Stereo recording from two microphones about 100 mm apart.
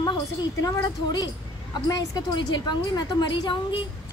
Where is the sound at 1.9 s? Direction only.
40° left (ahead or behind).